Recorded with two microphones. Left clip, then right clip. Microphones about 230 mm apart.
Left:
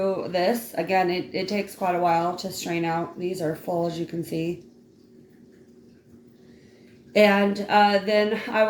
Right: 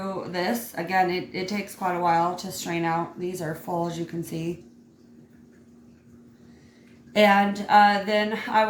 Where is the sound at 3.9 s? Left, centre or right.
Right.